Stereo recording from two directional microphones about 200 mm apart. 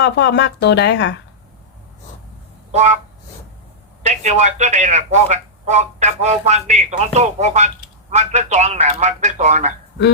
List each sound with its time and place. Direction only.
0.0 s speech: 60° left (ahead or behind)
2.7 s a man's voice: 35° right (ahead or behind)
4.0 s a man's voice: 35° right (ahead or behind)